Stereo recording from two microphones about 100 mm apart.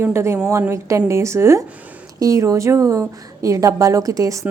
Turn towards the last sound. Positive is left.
turn(degrees=-35)  # may be behind; listen again after turning